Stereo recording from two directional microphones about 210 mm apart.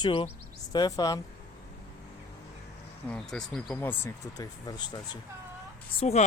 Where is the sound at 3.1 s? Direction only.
5° left (ahead or behind); by 5.0 s 20° left (ahead or behind).